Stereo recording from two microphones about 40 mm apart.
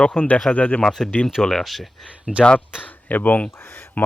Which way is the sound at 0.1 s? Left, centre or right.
Left.